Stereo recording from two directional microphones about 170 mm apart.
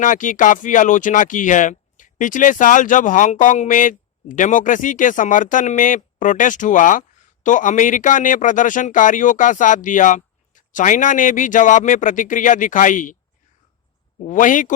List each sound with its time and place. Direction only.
0.0 s speech: 50° left (ahead or behind)
14.3 s speech: 50° left (ahead or behind)